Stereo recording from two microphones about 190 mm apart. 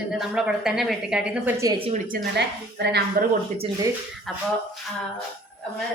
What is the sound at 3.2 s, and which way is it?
Speech, 50° right (ahead or behind).